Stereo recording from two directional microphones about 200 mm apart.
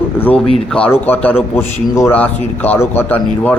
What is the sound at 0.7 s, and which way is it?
A man's voice, 5° left (ahead or behind).